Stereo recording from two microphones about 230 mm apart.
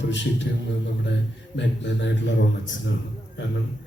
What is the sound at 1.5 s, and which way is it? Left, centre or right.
Speech, left.